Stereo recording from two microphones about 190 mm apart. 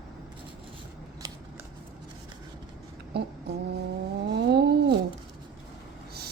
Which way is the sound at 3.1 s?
55° right (ahead or behind).